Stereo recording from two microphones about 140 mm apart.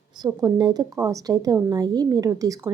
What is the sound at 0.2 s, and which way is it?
A woman's voice, 30° right (ahead or behind).